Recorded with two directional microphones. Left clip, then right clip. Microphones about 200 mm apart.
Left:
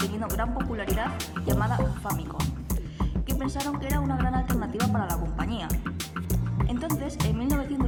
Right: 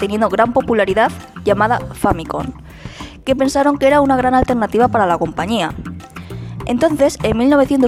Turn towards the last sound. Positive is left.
turn(degrees=-55)  # may be behind; listen again after turning